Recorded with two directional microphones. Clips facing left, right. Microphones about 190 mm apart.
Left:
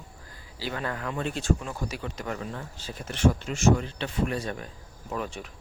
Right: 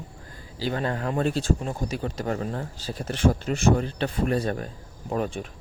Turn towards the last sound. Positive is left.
turn(degrees=-40)  # may be behind; listen again after turning